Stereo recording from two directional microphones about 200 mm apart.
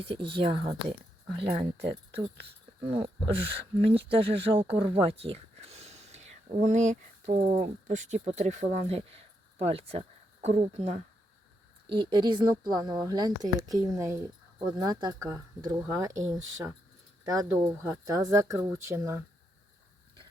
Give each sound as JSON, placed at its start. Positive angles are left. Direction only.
{"t": 0.0, "sound": "speech", "side_deg": -25}